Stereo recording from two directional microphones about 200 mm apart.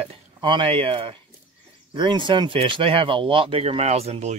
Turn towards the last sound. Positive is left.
turn(degrees=-30)  # may be behind; listen again after turning